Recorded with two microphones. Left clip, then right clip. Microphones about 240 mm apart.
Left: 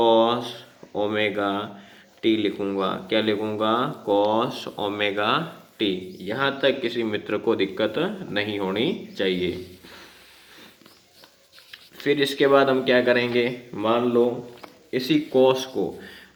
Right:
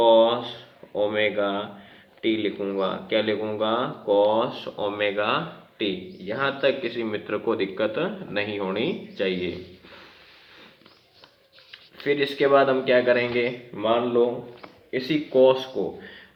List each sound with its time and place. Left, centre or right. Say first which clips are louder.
0.0 s speech: right 1 dB; left
12.0 s speech: left 2 dB; left